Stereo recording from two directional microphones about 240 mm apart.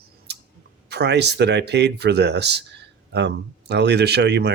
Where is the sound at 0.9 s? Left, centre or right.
Right.